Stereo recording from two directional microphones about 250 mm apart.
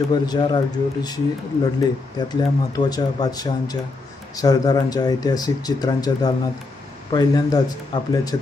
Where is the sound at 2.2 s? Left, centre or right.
Centre.